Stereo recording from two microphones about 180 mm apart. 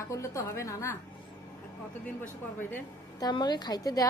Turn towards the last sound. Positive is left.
turn(degrees=20)  # may be behind; listen again after turning